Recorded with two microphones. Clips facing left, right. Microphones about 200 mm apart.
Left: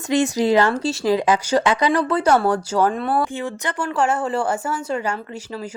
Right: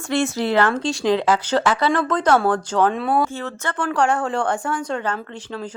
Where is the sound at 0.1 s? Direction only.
15° left (ahead or behind).